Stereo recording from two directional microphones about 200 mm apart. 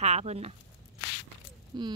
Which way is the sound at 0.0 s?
35° right (ahead or behind).